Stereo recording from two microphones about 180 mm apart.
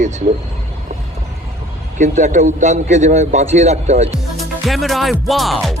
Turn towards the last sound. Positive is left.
turn(degrees=0)  # may be behind; listen again after turning